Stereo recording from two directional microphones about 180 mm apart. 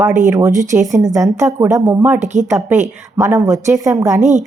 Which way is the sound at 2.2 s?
40° right (ahead or behind).